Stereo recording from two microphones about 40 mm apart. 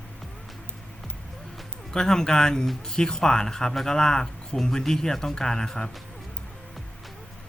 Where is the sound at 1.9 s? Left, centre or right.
Centre.